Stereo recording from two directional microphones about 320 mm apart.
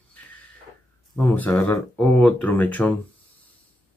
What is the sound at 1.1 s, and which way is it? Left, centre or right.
Speech, centre.